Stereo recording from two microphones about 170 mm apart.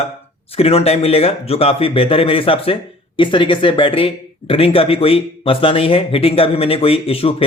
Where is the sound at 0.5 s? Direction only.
35° left (ahead or behind).